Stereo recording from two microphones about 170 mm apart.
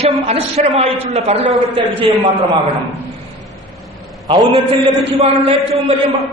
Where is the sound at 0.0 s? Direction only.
35° right (ahead or behind).